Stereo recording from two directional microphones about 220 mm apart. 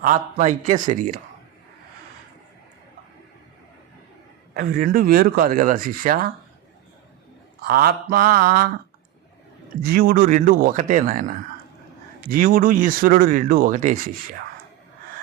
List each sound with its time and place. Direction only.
0.0 s speech: 35° right (ahead or behind)
4.5 s speech: 40° right (ahead or behind)
7.7 s speech: 40° right (ahead or behind)
9.8 s speech: 40° right (ahead or behind)